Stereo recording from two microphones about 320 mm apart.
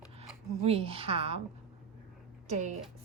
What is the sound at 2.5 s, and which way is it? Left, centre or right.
Speech, right.